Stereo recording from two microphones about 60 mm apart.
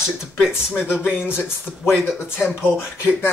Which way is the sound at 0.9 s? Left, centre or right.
Left.